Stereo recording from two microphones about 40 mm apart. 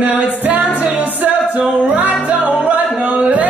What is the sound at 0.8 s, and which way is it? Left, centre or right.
Music, right.